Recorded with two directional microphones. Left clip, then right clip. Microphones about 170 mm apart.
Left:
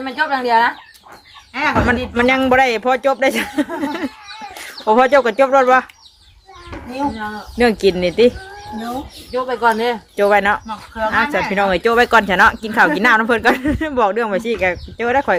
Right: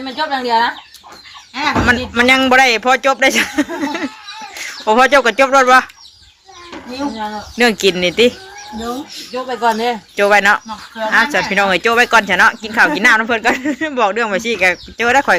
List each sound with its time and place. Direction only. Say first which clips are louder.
0.0 s speech: left 1 dB; 15° right (ahead or behind)
1.5 s speech: right 2 dB; 5° left (ahead or behind)
4.7 s speech: right 2 dB; 10° left (ahead or behind)
7.6 s speech: right 1 dB; 10° left (ahead or behind)
9.3 s speech: even; 30° right (ahead or behind)
10.2 s speech: right 3 dB; 10° left (ahead or behind)